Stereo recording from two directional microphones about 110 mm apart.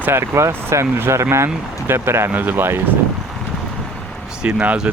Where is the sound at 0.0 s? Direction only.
20° right (ahead or behind).